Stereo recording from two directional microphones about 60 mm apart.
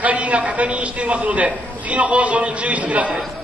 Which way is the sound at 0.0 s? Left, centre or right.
Right.